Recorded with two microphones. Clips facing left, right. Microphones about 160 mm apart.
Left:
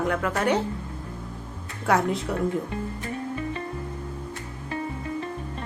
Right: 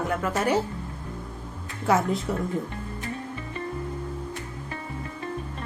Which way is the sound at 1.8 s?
Centre (ahead or behind).